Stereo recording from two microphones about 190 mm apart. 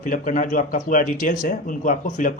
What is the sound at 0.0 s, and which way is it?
Speech, 45° left (ahead or behind).